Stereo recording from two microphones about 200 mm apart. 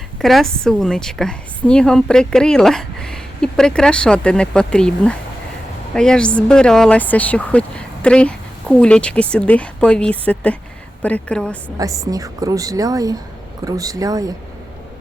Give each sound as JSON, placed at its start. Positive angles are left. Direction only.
{"t": 0.2, "sound": "a woman's voice", "side_deg": 0}
{"t": 11.8, "sound": "a woman's voice", "side_deg": -15}